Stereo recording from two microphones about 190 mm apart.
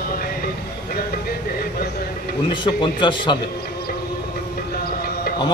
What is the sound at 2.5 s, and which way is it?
Speech, 25° left (ahead or behind).